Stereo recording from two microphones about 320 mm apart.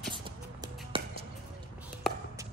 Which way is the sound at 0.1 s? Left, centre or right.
Centre.